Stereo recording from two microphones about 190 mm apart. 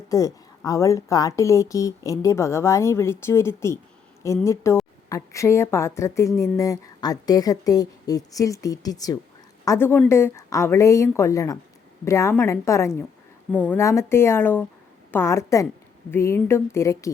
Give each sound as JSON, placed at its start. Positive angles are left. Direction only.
{"t": 0.1, "sound": "speech", "side_deg": 15}